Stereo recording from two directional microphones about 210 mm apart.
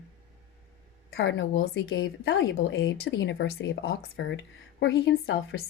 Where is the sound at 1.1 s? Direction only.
60° left (ahead or behind).